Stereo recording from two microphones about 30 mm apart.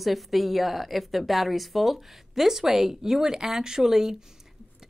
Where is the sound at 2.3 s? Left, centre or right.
Centre.